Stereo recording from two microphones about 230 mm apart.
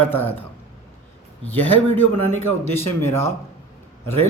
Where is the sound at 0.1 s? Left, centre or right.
Centre.